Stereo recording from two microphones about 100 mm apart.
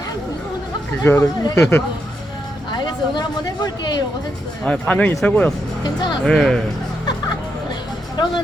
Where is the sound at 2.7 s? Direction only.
50° left (ahead or behind).